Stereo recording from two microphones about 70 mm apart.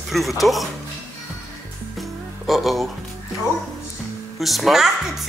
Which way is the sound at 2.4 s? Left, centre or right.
Centre.